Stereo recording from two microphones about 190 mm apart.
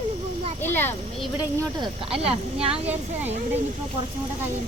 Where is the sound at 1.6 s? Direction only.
25° right (ahead or behind).